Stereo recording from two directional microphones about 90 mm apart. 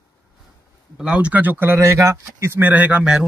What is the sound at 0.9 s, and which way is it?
Speech, 15° right (ahead or behind).